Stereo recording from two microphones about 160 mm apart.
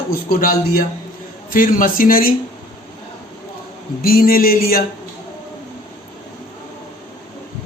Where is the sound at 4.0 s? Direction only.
70° left (ahead or behind).